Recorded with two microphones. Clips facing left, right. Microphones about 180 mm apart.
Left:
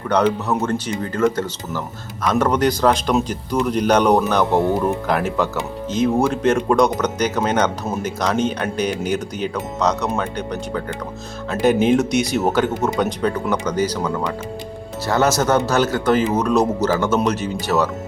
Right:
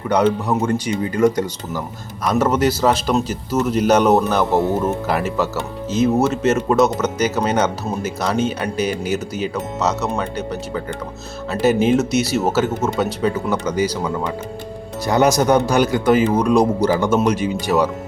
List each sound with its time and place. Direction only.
0.1 s speech: 10° right (ahead or behind)